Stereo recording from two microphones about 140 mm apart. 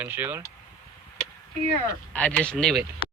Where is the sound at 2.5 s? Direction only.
Centre (ahead or behind).